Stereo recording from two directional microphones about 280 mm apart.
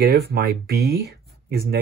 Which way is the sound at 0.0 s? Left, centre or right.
Right.